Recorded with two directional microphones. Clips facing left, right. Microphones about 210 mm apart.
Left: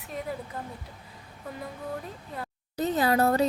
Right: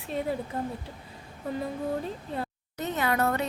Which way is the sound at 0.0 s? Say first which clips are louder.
Right 5 dB; 30° right (ahead or behind).